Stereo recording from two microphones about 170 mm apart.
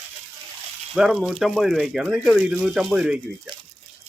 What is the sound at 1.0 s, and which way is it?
Speech, 5° right (ahead or behind).